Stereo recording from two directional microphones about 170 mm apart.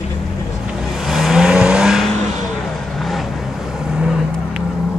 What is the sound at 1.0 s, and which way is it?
Vehicle, centre (ahead or behind).